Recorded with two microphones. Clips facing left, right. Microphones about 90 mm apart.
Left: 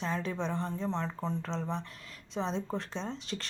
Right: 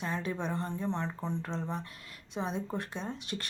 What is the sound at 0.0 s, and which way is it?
Speech, 10° right (ahead or behind).